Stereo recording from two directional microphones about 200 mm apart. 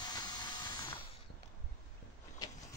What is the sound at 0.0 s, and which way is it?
Ratchet, 20° left (ahead or behind).